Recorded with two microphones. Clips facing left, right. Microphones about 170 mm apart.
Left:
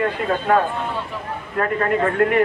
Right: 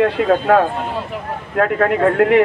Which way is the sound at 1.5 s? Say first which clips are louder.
Right 4 dB; 70° right (ahead or behind).